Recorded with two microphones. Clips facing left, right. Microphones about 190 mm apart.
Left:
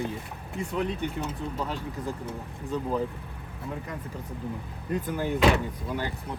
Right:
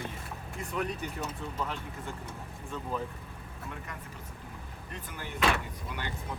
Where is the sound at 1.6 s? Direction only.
35° left (ahead or behind).